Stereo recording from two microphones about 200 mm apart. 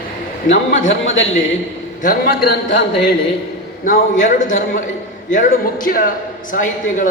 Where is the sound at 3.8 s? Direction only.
40° left (ahead or behind).